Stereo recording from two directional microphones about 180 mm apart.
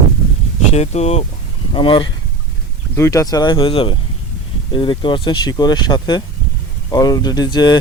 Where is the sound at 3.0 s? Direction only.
15° left (ahead or behind).